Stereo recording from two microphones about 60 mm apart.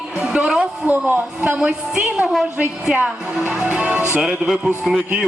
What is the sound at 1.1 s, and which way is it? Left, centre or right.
Speech, right.